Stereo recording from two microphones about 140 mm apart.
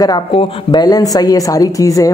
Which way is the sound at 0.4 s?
35° left (ahead or behind).